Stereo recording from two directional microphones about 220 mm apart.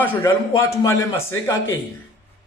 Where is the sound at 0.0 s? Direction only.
10° left (ahead or behind).